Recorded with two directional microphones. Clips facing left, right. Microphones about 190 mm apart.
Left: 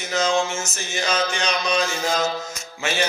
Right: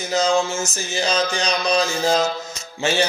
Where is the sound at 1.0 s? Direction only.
35° right (ahead or behind).